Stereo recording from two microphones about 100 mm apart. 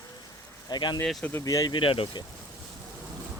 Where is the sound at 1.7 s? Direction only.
60° left (ahead or behind).